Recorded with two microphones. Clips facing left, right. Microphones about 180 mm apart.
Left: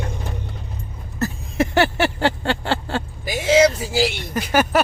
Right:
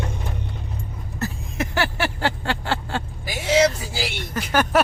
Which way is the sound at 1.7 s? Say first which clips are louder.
Left 5 dB; 25° left (ahead or behind).